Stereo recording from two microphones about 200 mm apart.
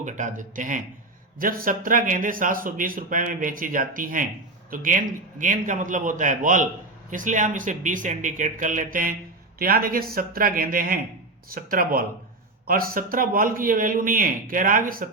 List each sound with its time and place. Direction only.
0.0 s speech: 40° right (ahead or behind)